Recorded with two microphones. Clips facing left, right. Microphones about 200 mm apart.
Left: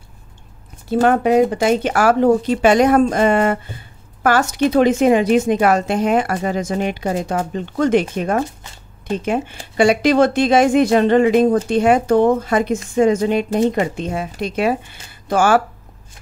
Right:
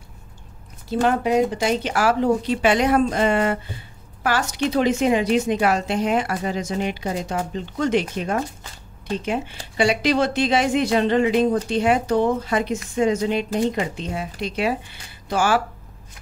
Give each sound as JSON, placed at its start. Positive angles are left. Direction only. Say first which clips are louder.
{"t": 0.8, "sound": "speech", "louder": "left 5 dB", "side_deg": 55}